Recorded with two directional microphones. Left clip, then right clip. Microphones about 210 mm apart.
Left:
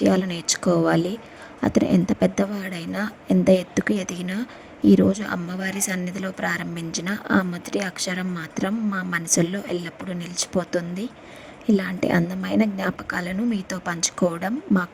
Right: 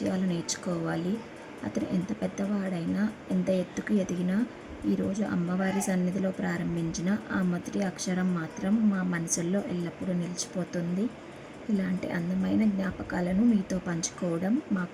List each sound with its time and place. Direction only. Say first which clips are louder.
0.0 s speech: left 10 dB; 50° left (ahead or behind)